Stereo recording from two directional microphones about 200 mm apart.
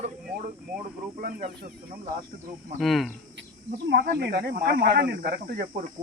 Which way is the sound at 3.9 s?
50° right (ahead or behind).